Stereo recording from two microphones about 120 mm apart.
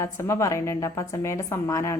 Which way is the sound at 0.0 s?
25° left (ahead or behind).